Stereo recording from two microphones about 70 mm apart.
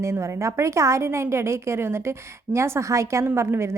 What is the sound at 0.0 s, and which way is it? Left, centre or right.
A woman's voice, right.